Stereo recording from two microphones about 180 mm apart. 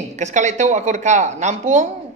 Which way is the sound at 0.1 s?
40° right (ahead or behind).